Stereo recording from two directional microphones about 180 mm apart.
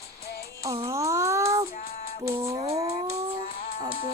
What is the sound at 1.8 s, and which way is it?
Music, 55° left (ahead or behind).